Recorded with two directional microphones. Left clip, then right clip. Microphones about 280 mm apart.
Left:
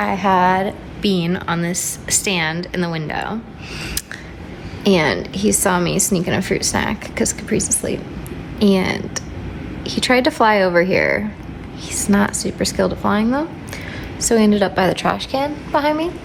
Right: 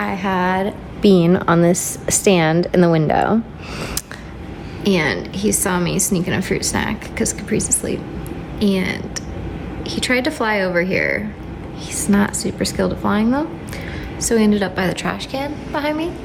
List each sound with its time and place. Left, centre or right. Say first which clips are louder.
0.0 s a woman's voice: left 5 dB; centre
1.0 s a woman's voice: right 6 dB; right
4.8 s a woman's voice: left 2 dB; centre